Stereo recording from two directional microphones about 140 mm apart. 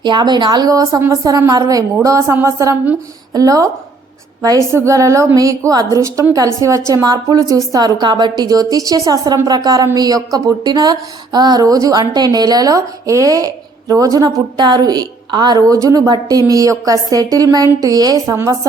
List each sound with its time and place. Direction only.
0.0 s speech: 30° right (ahead or behind)